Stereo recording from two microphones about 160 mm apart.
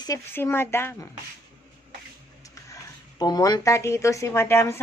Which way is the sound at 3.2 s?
25° left (ahead or behind).